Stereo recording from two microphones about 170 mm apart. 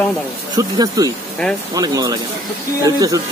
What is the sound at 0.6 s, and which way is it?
Speech, 20° right (ahead or behind).